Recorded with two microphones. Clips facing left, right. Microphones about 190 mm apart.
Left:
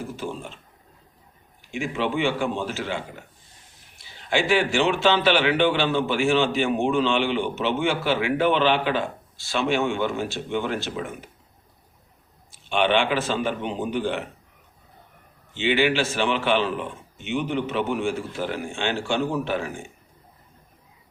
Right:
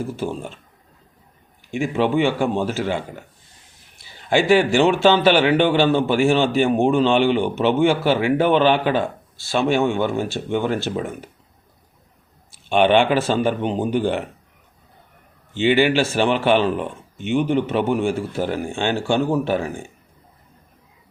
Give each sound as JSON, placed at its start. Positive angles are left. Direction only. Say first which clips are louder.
{"t": 0.2, "sound": "a man's voice", "louder": "right 5 dB", "side_deg": -35}
{"t": 1.8, "sound": "a man's voice", "louder": "right 6 dB", "side_deg": -40}
{"t": 4.3, "sound": "a man's voice", "louder": "right 6 dB", "side_deg": -40}
{"t": 12.6, "sound": "a man's voice", "louder": "right 6 dB", "side_deg": -45}
{"t": 15.5, "sound": "a man's voice", "louder": "right 5 dB", "side_deg": -45}